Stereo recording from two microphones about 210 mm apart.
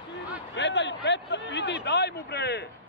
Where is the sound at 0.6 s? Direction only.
55° left (ahead or behind).